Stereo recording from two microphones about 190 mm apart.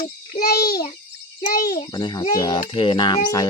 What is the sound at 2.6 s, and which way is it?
Speech, 25° left (ahead or behind).